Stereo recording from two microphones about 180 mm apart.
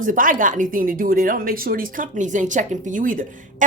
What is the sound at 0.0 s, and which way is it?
A woman's voice, 50° right (ahead or behind).